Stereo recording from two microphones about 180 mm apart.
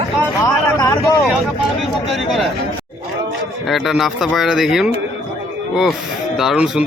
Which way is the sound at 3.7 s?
Centre (ahead or behind).